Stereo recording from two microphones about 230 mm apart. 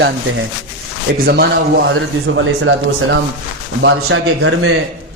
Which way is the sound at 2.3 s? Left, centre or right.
Right.